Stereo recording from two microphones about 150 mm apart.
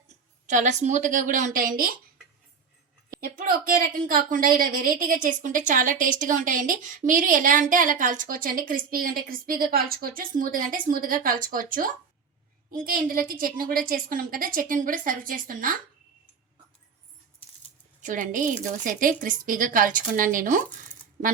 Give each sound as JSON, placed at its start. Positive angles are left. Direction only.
{"t": 0.4, "sound": "a woman's voice", "side_deg": -55}
{"t": 3.1, "sound": "a woman's voice", "side_deg": -70}
{"t": 18.0, "sound": "a woman's voice", "side_deg": -60}